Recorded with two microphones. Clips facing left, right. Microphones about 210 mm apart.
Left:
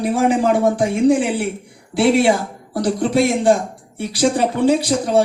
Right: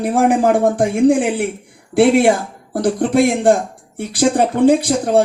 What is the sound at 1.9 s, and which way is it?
Speech, 50° right (ahead or behind).